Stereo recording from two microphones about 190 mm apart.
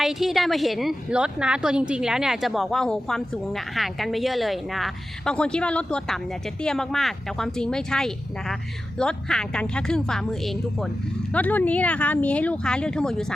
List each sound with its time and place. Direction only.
0.0 s a woman's voice: centre (ahead or behind)